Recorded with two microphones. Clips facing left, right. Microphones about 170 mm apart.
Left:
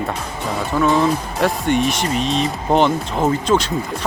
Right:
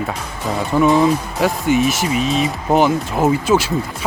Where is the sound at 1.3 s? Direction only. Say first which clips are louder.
Right 1 dB; centre (ahead or behind).